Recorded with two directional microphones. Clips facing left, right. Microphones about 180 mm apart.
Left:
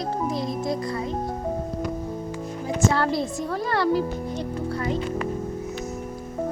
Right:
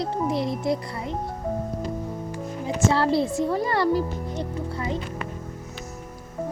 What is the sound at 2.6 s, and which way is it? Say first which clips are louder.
Speech: right 1 dB; 30° right (ahead or behind).